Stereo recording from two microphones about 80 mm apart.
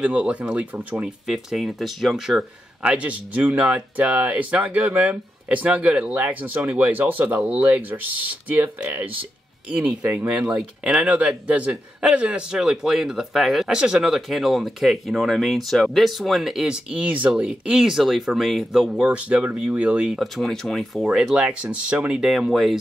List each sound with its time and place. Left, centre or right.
0.0 s a man's voice: centre
1.2 s a man's voice: centre
20.1 s speech: centre